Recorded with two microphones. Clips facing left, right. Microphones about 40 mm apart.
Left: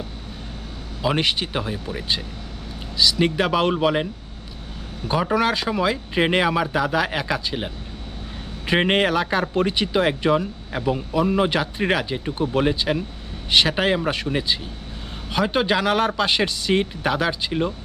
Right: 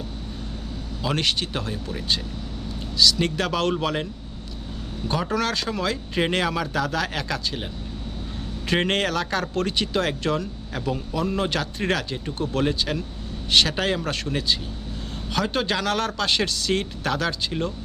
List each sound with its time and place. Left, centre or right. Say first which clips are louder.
1.0 s speech: left 3 dB; centre